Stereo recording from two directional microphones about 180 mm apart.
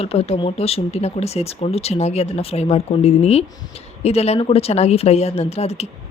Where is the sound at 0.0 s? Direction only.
35° left (ahead or behind).